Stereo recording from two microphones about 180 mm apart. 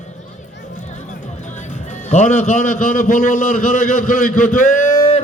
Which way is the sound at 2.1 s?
40° left (ahead or behind).